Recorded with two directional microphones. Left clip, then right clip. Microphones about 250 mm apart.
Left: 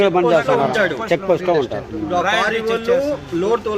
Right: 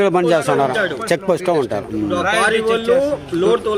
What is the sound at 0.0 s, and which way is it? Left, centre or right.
Speech, right.